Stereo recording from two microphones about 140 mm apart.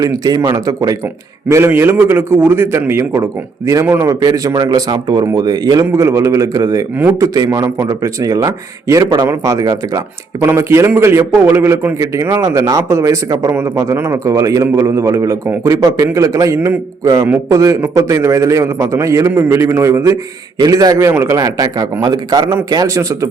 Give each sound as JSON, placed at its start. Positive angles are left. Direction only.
{"t": 0.0, "sound": "a man's voice", "side_deg": -25}
{"t": 6.9, "sound": "a man's voice", "side_deg": -15}
{"t": 7.3, "sound": "a man's voice", "side_deg": -25}